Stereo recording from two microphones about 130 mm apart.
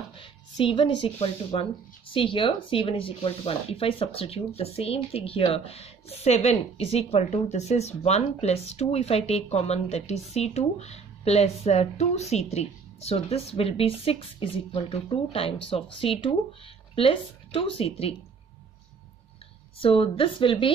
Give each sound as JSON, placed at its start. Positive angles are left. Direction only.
{"t": 0.1, "sound": "a woman's voice", "side_deg": 40}
{"t": 19.8, "sound": "a woman's voice", "side_deg": 45}